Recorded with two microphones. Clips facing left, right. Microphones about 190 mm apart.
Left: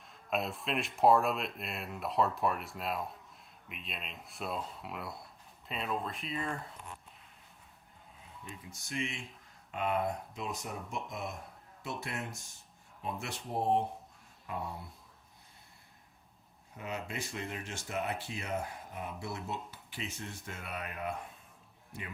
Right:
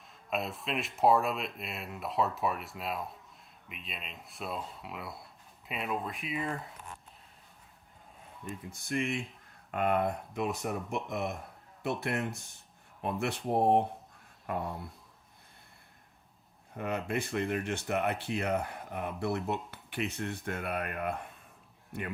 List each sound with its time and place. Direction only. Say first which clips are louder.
0.0 s speech: even; centre (ahead or behind)
8.6 s speech: right 5 dB; 55° right (ahead or behind)
16.7 s speech: right 7 dB; 55° right (ahead or behind)